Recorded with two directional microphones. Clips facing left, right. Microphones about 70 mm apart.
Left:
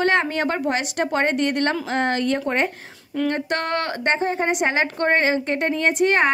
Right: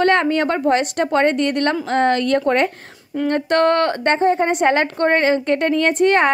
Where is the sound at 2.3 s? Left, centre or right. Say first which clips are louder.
Right 5 dB; right.